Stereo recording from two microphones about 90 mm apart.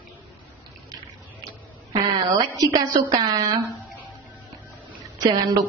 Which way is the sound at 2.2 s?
45° right (ahead or behind).